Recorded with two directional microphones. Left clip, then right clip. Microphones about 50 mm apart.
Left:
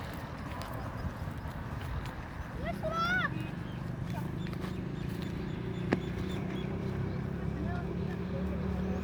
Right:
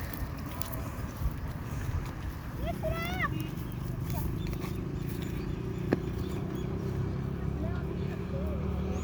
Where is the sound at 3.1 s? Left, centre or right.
Centre.